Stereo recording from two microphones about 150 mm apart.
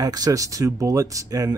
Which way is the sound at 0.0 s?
25° right (ahead or behind).